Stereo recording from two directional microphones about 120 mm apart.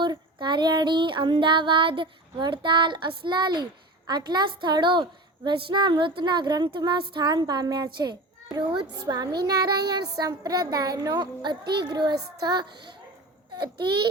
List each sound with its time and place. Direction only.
0.0 s female singing: 40° right (ahead or behind)